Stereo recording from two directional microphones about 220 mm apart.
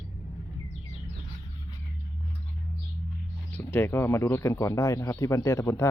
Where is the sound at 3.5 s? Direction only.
10° left (ahead or behind).